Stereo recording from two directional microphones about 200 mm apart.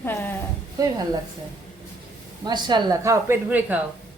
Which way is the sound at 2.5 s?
20° right (ahead or behind).